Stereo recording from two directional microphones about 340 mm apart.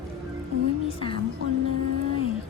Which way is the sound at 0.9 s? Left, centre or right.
Centre.